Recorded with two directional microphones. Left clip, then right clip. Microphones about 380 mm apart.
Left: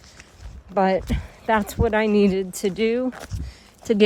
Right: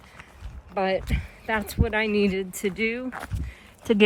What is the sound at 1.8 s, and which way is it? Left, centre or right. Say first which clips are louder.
Speech: left 4 dB; left.